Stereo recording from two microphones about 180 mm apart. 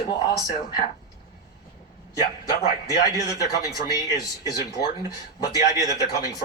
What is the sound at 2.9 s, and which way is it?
Speech, 20° left (ahead or behind).